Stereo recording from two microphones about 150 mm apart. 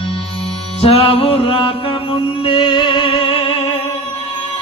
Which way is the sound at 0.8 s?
40° left (ahead or behind).